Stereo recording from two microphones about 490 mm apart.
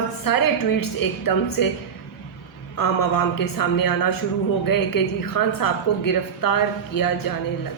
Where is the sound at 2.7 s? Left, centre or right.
Left.